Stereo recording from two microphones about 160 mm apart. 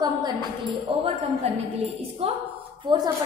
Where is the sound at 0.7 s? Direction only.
40° right (ahead or behind).